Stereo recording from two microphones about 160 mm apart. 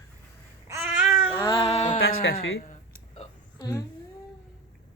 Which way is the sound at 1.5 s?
40° left (ahead or behind).